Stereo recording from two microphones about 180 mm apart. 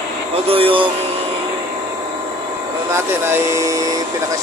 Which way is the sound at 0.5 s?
30° right (ahead or behind).